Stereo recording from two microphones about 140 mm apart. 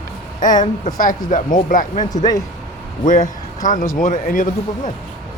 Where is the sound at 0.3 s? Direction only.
65° left (ahead or behind).